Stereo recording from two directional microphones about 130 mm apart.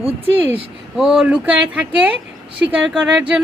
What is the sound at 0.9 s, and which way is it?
A woman's voice, 5° right (ahead or behind).